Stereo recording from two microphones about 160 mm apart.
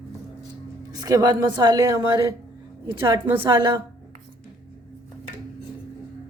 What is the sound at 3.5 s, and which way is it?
Speech, 25° right (ahead or behind).